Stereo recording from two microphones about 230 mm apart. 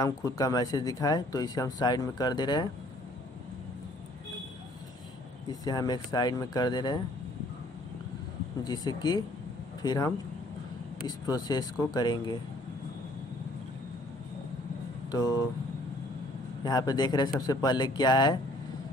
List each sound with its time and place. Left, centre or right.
0.0 s speech: centre
5.5 s speech: centre
8.6 s speech: centre
15.0 s speech: centre
16.6 s speech: centre